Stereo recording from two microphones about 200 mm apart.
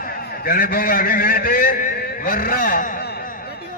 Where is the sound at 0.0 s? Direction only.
45° left (ahead or behind).